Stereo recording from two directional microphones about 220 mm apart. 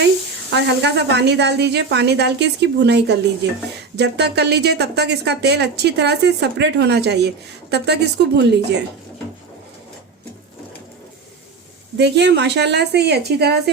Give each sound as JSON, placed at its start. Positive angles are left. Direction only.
{"t": 0.5, "sound": "speech", "side_deg": -50}
{"t": 11.9, "sound": "speech", "side_deg": -50}